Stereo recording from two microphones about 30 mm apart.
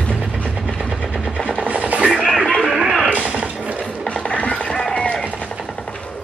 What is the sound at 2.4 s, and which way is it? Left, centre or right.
Music, left.